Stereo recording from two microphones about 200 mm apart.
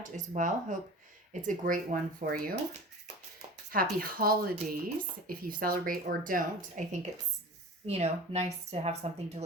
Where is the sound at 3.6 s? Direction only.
45° right (ahead or behind).